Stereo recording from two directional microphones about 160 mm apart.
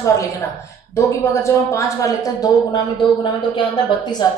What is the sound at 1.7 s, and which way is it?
Speech, 20° left (ahead or behind).